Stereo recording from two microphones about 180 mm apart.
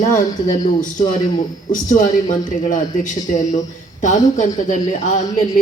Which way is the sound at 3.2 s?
45° left (ahead or behind).